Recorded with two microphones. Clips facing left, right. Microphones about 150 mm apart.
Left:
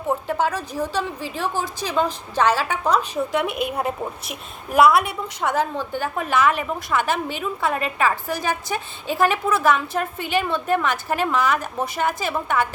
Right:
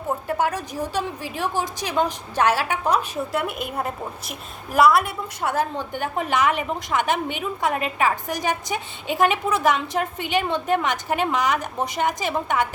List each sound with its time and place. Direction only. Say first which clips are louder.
0.3 s a woman's voice: left 1 dB; 15° right (ahead or behind)
3.4 s a woman's voice: left 4 dB; 65° left (ahead or behind)
3.7 s a woman's voice: left 3 dB; centre (ahead or behind)
5.5 s a woman's voice: left 1 dB; 15° right (ahead or behind)